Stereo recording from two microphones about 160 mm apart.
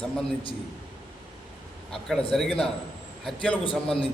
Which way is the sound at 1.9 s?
5° left (ahead or behind).